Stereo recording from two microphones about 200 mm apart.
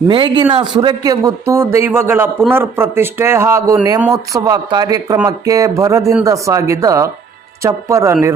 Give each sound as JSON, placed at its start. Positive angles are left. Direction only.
{"t": 0.1, "sound": "speech", "side_deg": -25}